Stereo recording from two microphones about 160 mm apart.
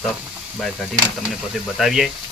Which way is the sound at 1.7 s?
Centre (ahead or behind).